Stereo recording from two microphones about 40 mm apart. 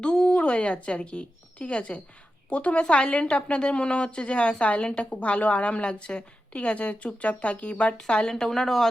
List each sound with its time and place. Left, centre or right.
0.0 s a woman's voice: left
7.9 s speech: left